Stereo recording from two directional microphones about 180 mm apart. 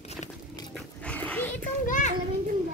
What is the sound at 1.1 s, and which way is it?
Dog, 10° left (ahead or behind).